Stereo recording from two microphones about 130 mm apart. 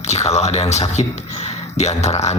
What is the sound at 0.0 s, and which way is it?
Speech, 60° left (ahead or behind).